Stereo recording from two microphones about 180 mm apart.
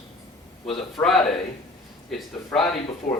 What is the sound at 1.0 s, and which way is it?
Speech, centre (ahead or behind).